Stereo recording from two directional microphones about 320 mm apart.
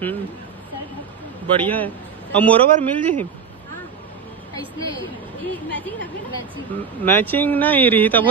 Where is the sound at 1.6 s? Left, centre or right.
Centre.